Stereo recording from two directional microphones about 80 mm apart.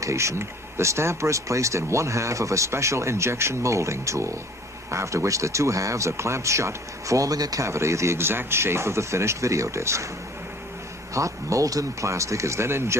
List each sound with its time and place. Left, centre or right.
0.0 s speech: right
11.1 s speech: right